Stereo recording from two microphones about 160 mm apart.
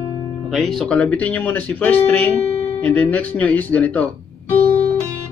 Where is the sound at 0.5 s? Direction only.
Centre (ahead or behind).